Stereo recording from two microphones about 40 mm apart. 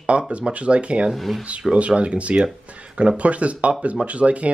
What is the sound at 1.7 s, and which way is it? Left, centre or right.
Speech, right.